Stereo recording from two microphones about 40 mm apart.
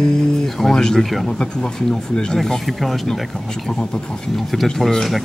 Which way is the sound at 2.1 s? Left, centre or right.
Centre.